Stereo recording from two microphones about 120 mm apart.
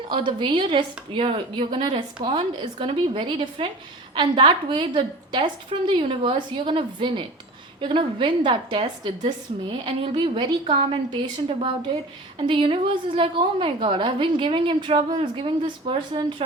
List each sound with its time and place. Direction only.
0.1 s a woman's voice: 40° right (ahead or behind)